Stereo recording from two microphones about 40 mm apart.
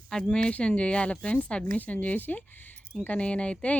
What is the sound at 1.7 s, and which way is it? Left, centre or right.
Speech, left.